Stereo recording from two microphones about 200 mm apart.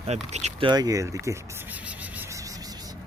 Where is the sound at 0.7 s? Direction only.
20° right (ahead or behind).